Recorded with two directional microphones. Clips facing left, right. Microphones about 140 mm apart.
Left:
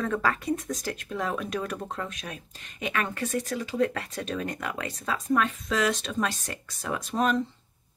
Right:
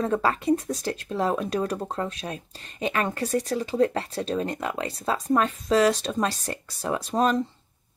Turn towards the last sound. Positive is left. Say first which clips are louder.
# right 3 dB
turn(degrees=-35)  # may be behind; listen again after turning